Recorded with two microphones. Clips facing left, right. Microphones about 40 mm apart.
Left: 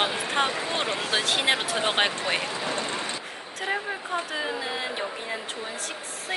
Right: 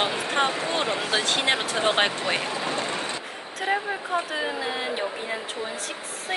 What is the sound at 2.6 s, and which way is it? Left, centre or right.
Vehicle, right.